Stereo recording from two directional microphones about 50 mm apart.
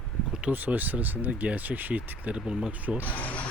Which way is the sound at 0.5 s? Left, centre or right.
Right.